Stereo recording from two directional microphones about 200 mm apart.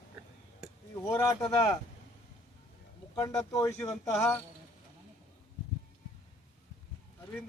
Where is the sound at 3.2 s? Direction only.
15° left (ahead or behind).